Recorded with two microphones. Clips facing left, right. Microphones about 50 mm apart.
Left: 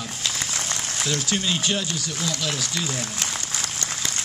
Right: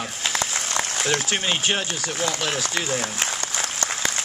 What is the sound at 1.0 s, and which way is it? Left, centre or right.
A man's voice, right.